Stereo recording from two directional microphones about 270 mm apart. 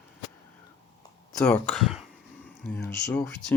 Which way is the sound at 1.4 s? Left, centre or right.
Centre.